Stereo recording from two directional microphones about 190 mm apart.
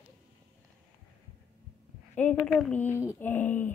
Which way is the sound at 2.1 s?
10° left (ahead or behind).